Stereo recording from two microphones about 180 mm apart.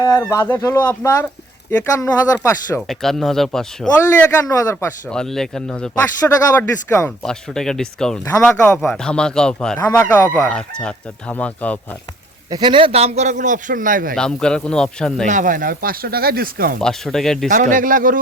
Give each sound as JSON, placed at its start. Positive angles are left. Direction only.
{"t": 0.0, "sound": "speech", "side_deg": 20}
{"t": 2.8, "sound": "speech", "side_deg": 0}
{"t": 4.2, "sound": "speech", "side_deg": 15}
{"t": 5.1, "sound": "speech", "side_deg": 0}
{"t": 12.5, "sound": "a man's voice", "side_deg": -25}
{"t": 14.2, "sound": "speech", "side_deg": 5}
{"t": 15.3, "sound": "speech", "side_deg": -45}
{"t": 16.8, "sound": "speech", "side_deg": 5}
{"t": 17.5, "sound": "speech", "side_deg": -50}